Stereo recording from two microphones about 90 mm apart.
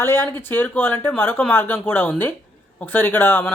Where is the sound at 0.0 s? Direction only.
25° left (ahead or behind).